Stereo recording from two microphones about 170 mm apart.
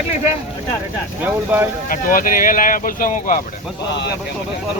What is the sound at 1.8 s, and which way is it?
Speech, 55° left (ahead or behind).